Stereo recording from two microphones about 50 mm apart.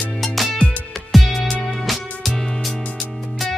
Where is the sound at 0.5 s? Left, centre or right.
Left.